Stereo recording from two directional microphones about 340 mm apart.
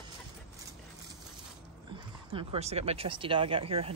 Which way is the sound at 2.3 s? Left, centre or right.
Centre.